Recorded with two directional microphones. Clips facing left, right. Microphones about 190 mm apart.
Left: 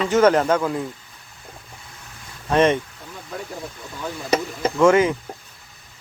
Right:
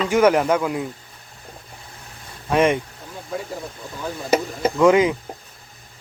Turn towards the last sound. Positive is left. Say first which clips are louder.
# even
turn(degrees=-15)  # may be behind; listen again after turning